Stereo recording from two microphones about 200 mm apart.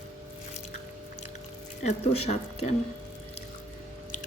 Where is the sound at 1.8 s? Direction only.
30° left (ahead or behind).